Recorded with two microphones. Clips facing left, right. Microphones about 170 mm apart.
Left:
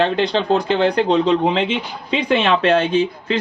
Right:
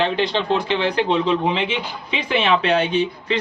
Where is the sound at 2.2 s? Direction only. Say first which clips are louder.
Left 3 dB; 10° right (ahead or behind).